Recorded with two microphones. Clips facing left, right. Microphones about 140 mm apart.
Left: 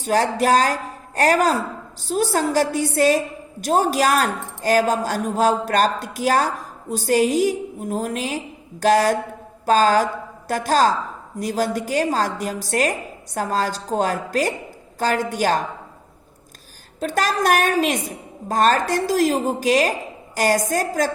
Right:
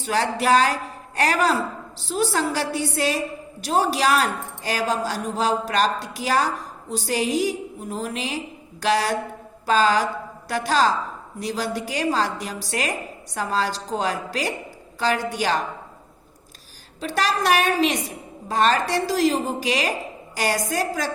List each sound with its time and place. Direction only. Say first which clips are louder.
0.0 s a woman's voice: left 4 dB; 45° left (ahead or behind)
17.0 s a woman's voice: left 2 dB; 45° left (ahead or behind)